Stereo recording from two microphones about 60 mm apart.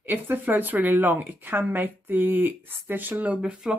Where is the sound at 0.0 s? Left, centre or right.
Right.